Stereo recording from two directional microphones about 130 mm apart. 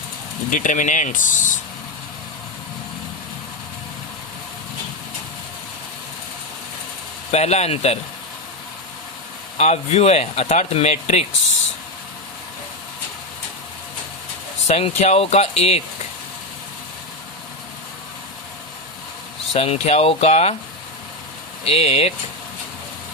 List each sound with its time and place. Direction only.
0.5 s speech: 80° left
7.3 s speech: 55° left (ahead or behind)
9.6 s speech: 55° left (ahead or behind)
14.7 s speech: 55° left (ahead or behind)
19.5 s speech: 55° left (ahead or behind)
21.6 s speech: 50° left (ahead or behind)